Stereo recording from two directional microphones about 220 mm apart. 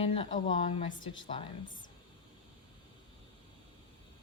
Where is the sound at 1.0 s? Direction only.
60° left (ahead or behind).